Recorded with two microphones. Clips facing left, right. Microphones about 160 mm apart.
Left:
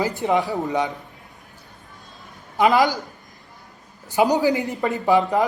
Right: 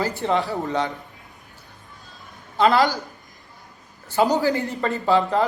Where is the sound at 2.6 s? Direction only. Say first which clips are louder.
Left 1 dB; 15° left (ahead or behind).